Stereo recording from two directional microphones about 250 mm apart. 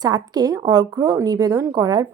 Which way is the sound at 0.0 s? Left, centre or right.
Centre.